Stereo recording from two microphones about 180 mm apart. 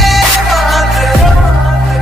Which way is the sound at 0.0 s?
Centre (ahead or behind).